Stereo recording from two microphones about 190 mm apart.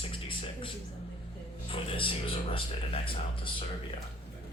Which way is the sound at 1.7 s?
30° left (ahead or behind).